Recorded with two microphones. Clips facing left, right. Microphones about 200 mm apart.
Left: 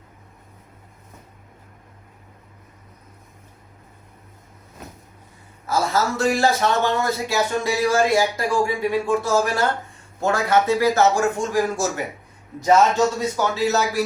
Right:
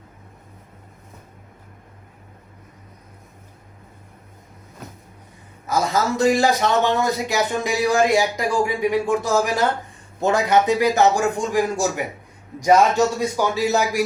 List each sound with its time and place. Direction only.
5.6 s a man's voice: 15° right (ahead or behind)